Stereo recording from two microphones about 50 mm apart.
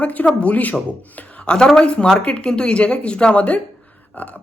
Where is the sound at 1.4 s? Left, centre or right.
Centre.